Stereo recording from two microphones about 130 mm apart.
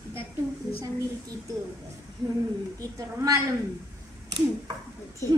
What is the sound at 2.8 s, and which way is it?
Speech, 25° right (ahead or behind).